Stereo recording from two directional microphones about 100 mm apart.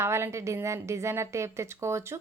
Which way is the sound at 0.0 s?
25° right (ahead or behind).